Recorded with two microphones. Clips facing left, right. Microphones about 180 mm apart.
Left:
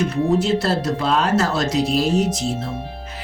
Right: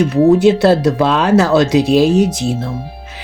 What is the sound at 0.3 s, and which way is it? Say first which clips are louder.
Speech: right 9 dB; 70° right (ahead or behind).